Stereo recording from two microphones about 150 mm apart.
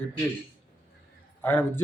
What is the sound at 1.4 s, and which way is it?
Speech, 10° left (ahead or behind).